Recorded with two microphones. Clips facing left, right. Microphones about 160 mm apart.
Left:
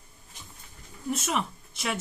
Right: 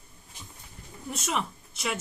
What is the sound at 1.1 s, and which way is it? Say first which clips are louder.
Speech: left 2 dB; centre (ahead or behind).